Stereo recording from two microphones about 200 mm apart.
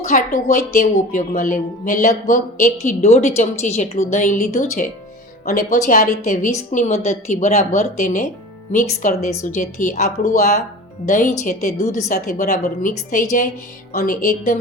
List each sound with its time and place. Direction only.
0.0 s speech: 40° left (ahead or behind)